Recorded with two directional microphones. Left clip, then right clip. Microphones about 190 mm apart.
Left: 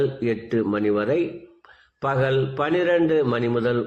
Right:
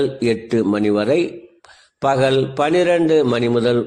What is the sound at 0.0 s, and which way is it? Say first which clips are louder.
A man's voice: right 5 dB; 40° right (ahead or behind).